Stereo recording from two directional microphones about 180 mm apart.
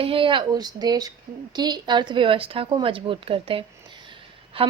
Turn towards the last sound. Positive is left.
turn(degrees=-30)  # may be behind; listen again after turning